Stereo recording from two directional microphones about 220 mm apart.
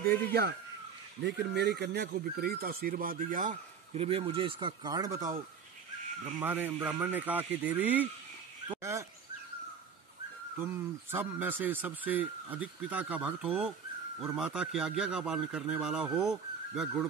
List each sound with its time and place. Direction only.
0.0 s speech: 45° right (ahead or behind); by 5.3 s 15° right (ahead or behind)
6.4 s speech: 10° right (ahead or behind)
10.6 s a man's voice: 10° right (ahead or behind)